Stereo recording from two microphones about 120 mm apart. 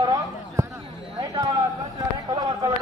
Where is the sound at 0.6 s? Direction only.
25° right (ahead or behind).